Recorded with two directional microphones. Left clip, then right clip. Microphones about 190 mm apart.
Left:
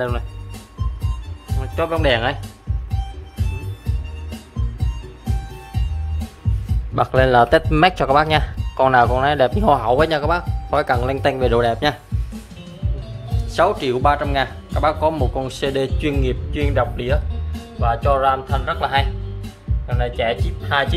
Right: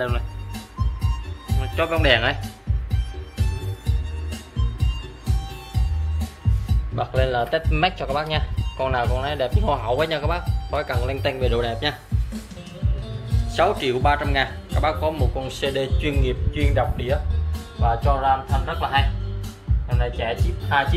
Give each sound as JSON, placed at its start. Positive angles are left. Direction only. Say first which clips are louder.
{"t": 1.6, "sound": "speech", "louder": "left 2 dB", "side_deg": 25}
{"t": 7.0, "sound": "speech", "louder": "left 9 dB", "side_deg": 45}
{"t": 13.6, "sound": "speech", "louder": "left 3 dB", "side_deg": 25}